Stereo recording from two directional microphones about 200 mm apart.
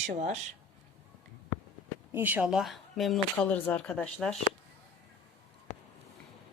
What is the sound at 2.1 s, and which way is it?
Speech, 10° right (ahead or behind).